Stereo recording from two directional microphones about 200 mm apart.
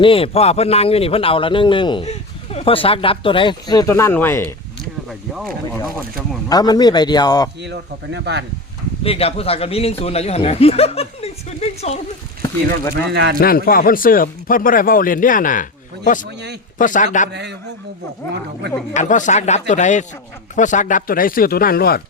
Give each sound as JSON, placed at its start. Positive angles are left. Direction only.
{"t": 0.0, "sound": "speech", "side_deg": 25}
{"t": 5.0, "sound": "speech", "side_deg": 0}
{"t": 6.5, "sound": "speech", "side_deg": 20}
{"t": 7.6, "sound": "speech", "side_deg": -60}
{"t": 9.0, "sound": "speech", "side_deg": 30}
{"t": 12.4, "sound": "speech", "side_deg": 15}
{"t": 13.1, "sound": "speech", "side_deg": -55}
{"t": 13.4, "sound": "speech", "side_deg": 45}
{"t": 16.7, "sound": "speech", "side_deg": 40}
{"t": 18.9, "sound": "speech", "side_deg": 40}